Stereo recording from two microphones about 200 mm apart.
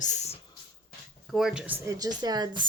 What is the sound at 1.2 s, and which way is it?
Speech, centre (ahead or behind).